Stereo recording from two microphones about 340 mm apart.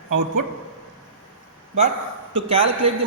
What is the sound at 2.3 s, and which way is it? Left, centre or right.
Speech, centre.